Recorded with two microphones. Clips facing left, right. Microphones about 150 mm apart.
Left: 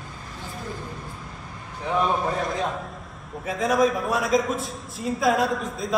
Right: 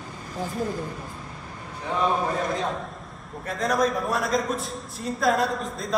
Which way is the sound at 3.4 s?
Centre (ahead or behind).